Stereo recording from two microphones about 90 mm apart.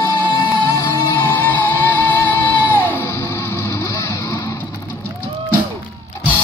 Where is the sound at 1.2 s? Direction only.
25° left (ahead or behind).